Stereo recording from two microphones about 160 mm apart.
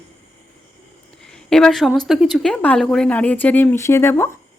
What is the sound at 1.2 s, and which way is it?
A woman's voice, 5° left (ahead or behind).